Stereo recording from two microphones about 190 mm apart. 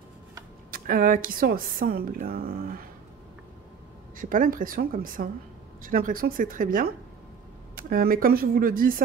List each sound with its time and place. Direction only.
0.7 s speech: 50° right (ahead or behind)
4.2 s speech: 45° right (ahead or behind)